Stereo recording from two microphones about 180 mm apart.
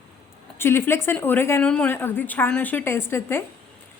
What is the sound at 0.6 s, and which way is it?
A woman's voice, 15° left (ahead or behind).